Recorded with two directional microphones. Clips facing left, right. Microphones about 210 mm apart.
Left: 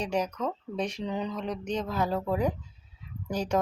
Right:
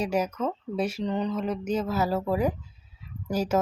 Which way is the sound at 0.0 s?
5° right (ahead or behind).